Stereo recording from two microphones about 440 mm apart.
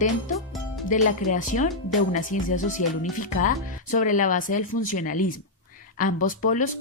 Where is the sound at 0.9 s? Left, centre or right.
Centre.